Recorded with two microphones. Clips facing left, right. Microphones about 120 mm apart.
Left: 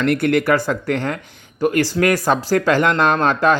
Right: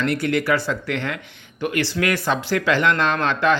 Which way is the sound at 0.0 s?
55° left (ahead or behind).